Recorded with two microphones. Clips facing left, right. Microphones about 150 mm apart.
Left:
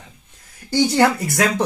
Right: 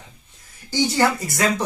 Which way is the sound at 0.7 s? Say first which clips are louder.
Left 4 dB; 60° left (ahead or behind).